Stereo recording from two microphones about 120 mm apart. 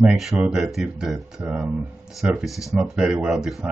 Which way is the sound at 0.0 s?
Centre (ahead or behind).